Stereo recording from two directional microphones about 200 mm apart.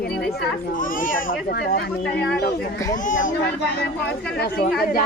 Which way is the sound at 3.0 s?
40° left (ahead or behind).